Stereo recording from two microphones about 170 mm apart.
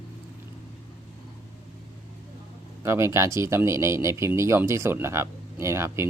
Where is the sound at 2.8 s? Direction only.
15° right (ahead or behind).